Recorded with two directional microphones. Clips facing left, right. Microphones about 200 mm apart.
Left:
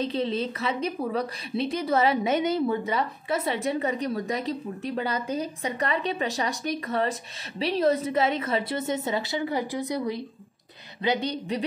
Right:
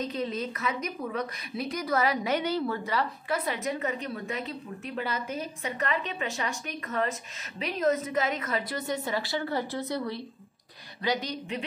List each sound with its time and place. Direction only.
0.0 s a woman's voice: 30° left (ahead or behind); by 10.2 s 15° left (ahead or behind)
11.0 s a woman's voice: 25° left (ahead or behind)